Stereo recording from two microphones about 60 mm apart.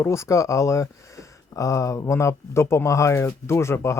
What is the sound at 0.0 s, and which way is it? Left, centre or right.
Speech, left.